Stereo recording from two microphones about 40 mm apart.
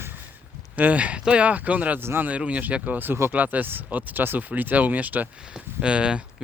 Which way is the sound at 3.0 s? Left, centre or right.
Right.